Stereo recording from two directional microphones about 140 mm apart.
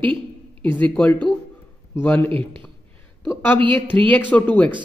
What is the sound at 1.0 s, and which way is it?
Speech, 10° left (ahead or behind).